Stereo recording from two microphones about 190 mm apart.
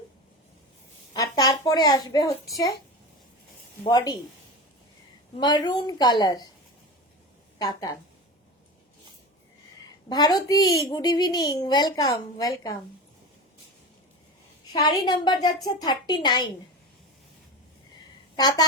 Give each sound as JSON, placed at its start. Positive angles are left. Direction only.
{"t": 1.1, "sound": "a child's voice", "side_deg": 20}
{"t": 3.8, "sound": "speech", "side_deg": 20}
{"t": 5.4, "sound": "speech", "side_deg": 20}
{"t": 7.6, "sound": "speech", "side_deg": 20}
{"t": 10.1, "sound": "speech", "side_deg": 20}
{"t": 14.7, "sound": "speech", "side_deg": 20}
{"t": 18.3, "sound": "speech", "side_deg": 20}